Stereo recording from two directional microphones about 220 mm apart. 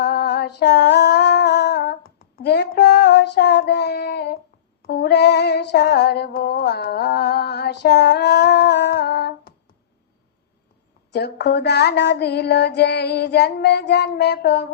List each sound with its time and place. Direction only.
0.0 s female singing: 50° left (ahead or behind)
11.1 s music: 50° left (ahead or behind)